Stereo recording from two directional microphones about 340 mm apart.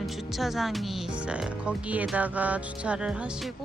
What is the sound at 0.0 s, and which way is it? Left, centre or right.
Speech, centre.